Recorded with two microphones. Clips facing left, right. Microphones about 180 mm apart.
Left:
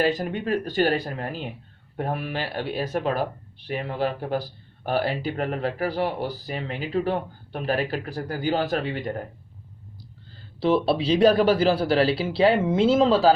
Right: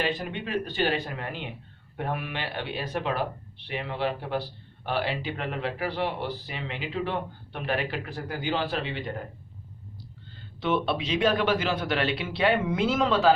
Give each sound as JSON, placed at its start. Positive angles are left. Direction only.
{"t": 0.0, "sound": "speech", "side_deg": 40}
{"t": 10.6, "sound": "speech", "side_deg": 35}